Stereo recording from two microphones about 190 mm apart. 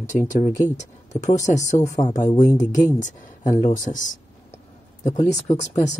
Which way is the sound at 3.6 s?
40° left (ahead or behind).